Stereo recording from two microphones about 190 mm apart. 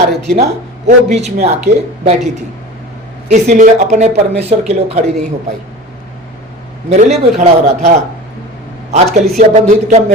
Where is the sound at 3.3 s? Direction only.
40° right (ahead or behind).